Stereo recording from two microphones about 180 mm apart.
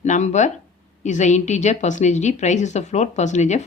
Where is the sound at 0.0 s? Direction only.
40° left (ahead or behind).